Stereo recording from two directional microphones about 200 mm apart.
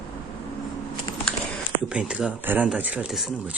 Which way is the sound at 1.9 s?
5° right (ahead or behind).